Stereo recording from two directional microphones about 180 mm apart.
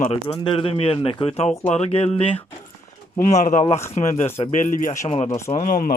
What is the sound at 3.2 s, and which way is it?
Speech, 45° left (ahead or behind).